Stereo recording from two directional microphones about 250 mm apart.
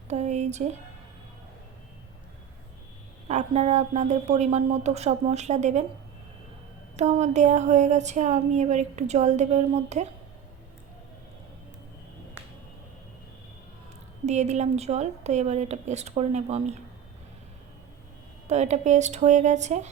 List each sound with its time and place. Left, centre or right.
0.1 s a woman's voice: right
3.2 s a woman's voice: right
6.9 s a woman's voice: right
14.3 s a woman's voice: right
18.4 s a woman's voice: right